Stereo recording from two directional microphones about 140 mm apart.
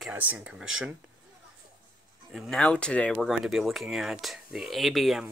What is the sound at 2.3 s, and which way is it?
Speech, 5° left (ahead or behind).